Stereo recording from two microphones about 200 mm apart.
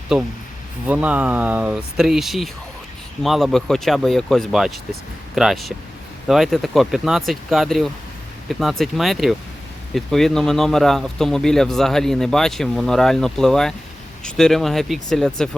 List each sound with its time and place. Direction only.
0.1 s speech: 5° right (ahead or behind)